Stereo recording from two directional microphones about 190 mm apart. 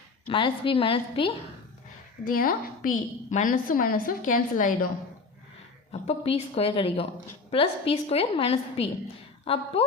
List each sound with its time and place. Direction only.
0.3 s a woman's voice: 25° left (ahead or behind)
2.2 s a woman's voice: 45° left (ahead or behind)
5.9 s a woman's voice: 30° left (ahead or behind)